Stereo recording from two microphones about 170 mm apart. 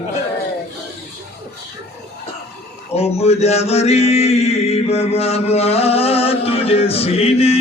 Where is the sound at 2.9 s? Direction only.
40° left (ahead or behind).